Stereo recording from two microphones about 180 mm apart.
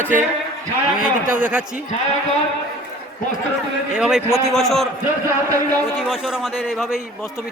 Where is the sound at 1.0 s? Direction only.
5° right (ahead or behind).